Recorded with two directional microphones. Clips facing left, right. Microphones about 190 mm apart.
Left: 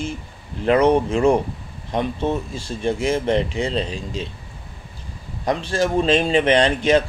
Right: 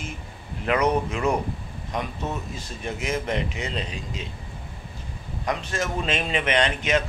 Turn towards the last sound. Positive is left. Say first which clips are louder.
# left 6 dB
turn(degrees=30)  # may be behind; listen again after turning